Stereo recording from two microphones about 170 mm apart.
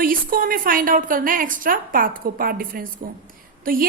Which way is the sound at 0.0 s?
55° right (ahead or behind).